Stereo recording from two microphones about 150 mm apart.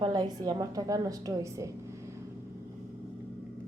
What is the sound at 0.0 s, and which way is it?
A woman's voice, 25° right (ahead or behind).